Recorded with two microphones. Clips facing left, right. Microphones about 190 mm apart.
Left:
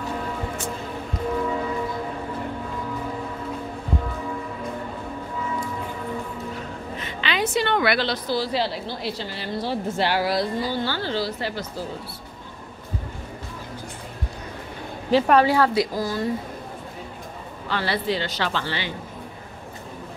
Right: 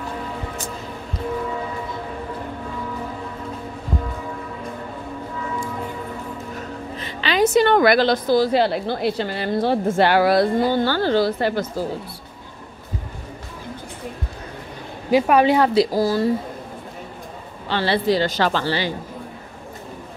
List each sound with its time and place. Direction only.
7.0 s a woman's voice: 35° right (ahead or behind); by 11.6 s 55° right (ahead or behind)
15.0 s speech: 10° right (ahead or behind)
15.8 s speech: 35° right (ahead or behind)
17.6 s speech: 30° right (ahead or behind)